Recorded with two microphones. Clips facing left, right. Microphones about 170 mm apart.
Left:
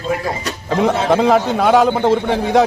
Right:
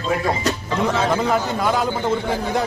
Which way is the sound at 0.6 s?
60° left (ahead or behind).